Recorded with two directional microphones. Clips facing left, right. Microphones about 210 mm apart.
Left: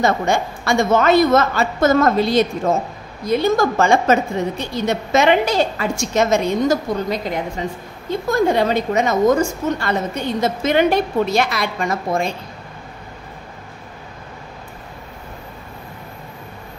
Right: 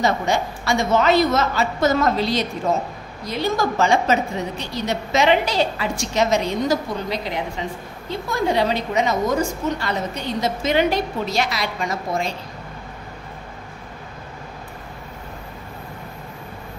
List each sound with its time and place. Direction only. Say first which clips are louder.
0.0 s a woman's voice: left 3 dB; 50° left (ahead or behind)